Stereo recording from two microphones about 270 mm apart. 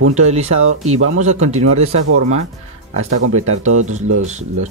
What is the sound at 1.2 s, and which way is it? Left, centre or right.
Speech, right.